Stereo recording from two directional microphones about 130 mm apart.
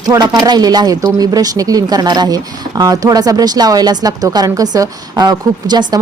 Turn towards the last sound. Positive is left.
turn(degrees=-30)  # may be behind; listen again after turning